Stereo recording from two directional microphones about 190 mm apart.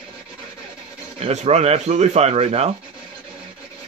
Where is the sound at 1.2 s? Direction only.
35° right (ahead or behind).